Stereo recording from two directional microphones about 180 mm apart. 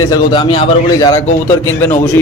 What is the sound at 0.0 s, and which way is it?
A man's voice, 20° left (ahead or behind).